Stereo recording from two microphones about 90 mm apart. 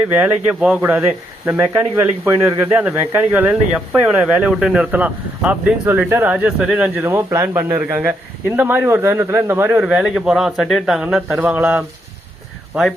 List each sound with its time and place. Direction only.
0.1 s a man's voice: 15° right (ahead or behind)
7.0 s a man's voice: 25° right (ahead or behind)
9.8 s speech: 10° right (ahead or behind)
11.3 s a man's voice: 25° right (ahead or behind)